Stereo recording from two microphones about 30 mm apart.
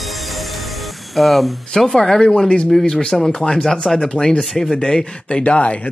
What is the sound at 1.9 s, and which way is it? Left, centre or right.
Speech, centre.